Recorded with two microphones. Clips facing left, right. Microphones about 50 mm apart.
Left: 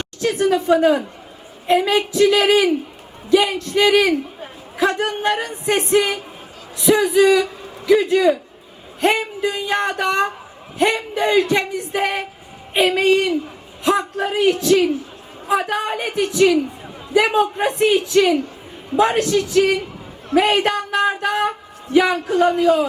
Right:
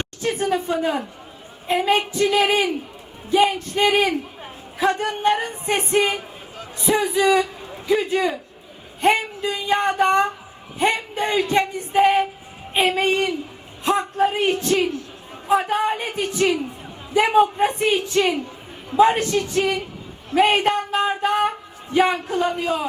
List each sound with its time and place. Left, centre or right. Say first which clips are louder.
0.2 s a man's voice: left 5 dB; left
1.6 s speech: left 3 dB; left
3.2 s speech: left 2 dB; left
7.9 s a man's voice: left 6 dB; left
11.5 s a man's voice: right 2 dB; left
13.8 s a man's voice: left 1 dB; left
17.2 s a man's voice: even; left
20.3 s a man's voice: left 1 dB; left